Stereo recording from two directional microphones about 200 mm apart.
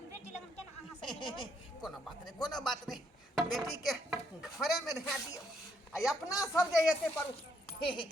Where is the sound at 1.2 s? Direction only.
25° left (ahead or behind).